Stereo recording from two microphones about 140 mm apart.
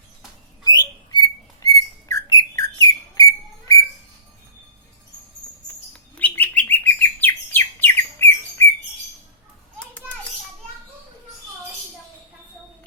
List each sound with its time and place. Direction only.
0.6 s rodents: 30° left (ahead or behind)
2.1 s bird: 25° left (ahead or behind)
6.1 s bird: 10° left (ahead or behind)